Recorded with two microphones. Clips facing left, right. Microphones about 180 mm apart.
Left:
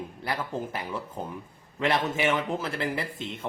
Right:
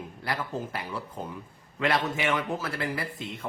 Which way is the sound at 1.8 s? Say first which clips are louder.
Left 1 dB; 25° left (ahead or behind).